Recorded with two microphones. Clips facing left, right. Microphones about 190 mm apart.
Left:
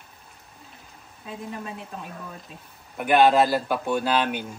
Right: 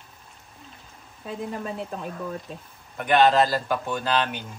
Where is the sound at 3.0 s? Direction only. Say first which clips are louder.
Left 1 dB; 10° left (ahead or behind).